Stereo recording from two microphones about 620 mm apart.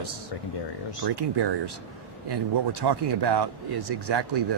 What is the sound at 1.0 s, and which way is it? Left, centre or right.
Speech, right.